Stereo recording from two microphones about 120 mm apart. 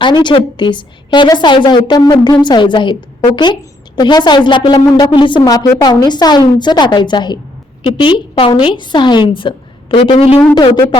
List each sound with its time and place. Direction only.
0.0 s a woman's voice: 40° left (ahead or behind)